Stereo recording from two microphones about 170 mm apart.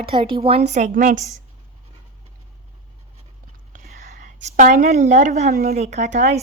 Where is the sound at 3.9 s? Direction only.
45° right (ahead or behind).